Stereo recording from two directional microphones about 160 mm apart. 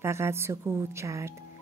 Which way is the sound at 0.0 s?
15° right (ahead or behind).